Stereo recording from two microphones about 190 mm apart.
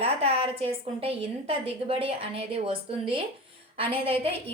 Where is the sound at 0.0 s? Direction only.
30° right (ahead or behind).